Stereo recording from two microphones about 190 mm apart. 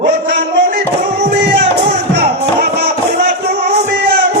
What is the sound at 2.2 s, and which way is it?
Music, 60° right (ahead or behind).